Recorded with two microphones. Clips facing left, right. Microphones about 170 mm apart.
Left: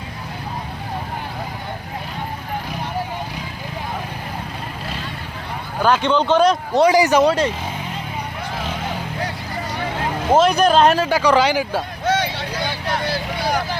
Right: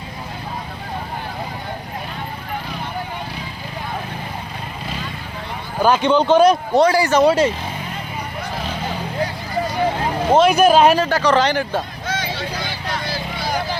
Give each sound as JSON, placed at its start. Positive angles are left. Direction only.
{"t": 5.8, "sound": "speech", "side_deg": -10}
{"t": 6.8, "sound": "speech", "side_deg": 15}
{"t": 7.2, "sound": "speech", "side_deg": -10}
{"t": 10.3, "sound": "speech", "side_deg": -5}
{"t": 11.0, "sound": "speech", "side_deg": 10}
{"t": 12.0, "sound": "a sound", "side_deg": 70}